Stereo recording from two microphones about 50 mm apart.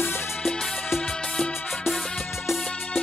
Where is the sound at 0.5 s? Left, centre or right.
Centre.